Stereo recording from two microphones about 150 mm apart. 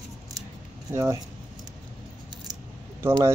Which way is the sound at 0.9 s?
20° right (ahead or behind).